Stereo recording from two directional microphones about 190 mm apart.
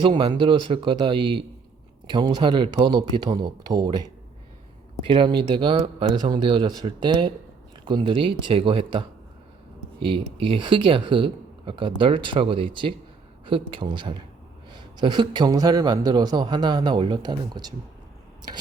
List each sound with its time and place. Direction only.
0.0 s a man's voice: 25° right (ahead or behind)
5.0 s a man's voice: 25° right (ahead or behind)